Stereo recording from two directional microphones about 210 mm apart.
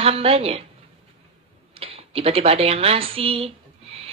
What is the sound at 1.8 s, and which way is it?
Speech, 25° right (ahead or behind).